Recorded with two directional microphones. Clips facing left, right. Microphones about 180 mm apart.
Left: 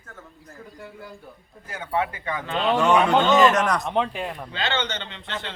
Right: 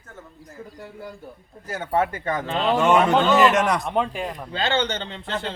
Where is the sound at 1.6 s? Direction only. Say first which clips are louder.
Right 3 dB; 45° right (ahead or behind).